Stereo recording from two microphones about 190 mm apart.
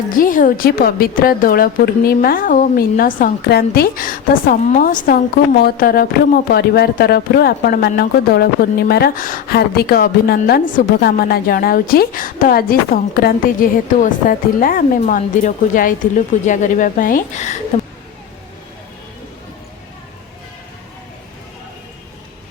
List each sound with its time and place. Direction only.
0.1 s a woman's voice: 45° left (ahead or behind)